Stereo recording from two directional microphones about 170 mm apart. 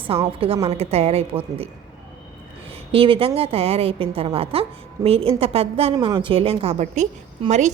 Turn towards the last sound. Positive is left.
turn(degrees=-45)  # may be behind; listen again after turning